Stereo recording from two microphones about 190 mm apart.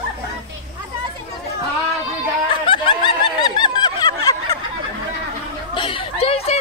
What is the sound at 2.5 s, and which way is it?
Snicker, 25° left (ahead or behind).